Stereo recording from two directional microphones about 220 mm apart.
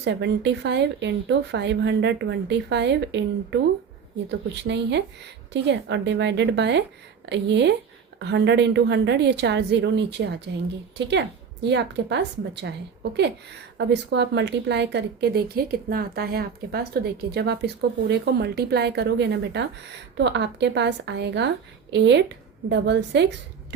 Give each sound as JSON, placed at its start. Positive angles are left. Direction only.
{"t": 0.0, "sound": "a woman's voice", "side_deg": -55}